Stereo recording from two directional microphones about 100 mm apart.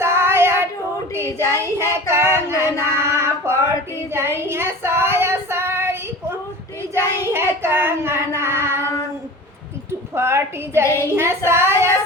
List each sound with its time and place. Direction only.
0.0 s child singing: 25° right (ahead or behind)
4.1 s female singing: 25° right (ahead or behind)
7.3 s child singing: 25° right (ahead or behind)
10.2 s a woman's voice: 25° right (ahead or behind)
10.8 s a woman's voice: 30° left (ahead or behind)
11.1 s a woman's voice: 25° right (ahead or behind)